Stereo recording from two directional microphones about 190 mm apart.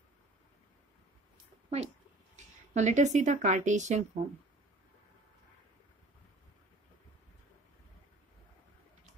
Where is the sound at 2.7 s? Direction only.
40° right (ahead or behind).